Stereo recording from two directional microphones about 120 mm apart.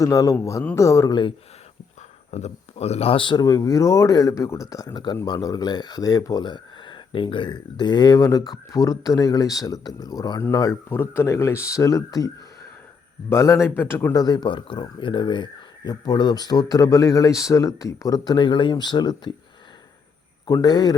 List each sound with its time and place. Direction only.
0.0 s speech: 30° left (ahead or behind)
2.3 s speech: 65° left (ahead or behind); by 3.4 s 40° left (ahead or behind)
3.4 s speech: 30° left (ahead or behind)
13.3 s speech: 25° left (ahead or behind)
14.2 s speech: 35° left (ahead or behind)
20.5 s speech: 30° left (ahead or behind)